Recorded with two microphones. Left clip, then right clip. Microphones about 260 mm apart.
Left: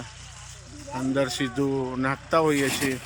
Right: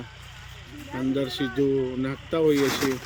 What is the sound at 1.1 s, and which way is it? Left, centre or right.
Speech, centre.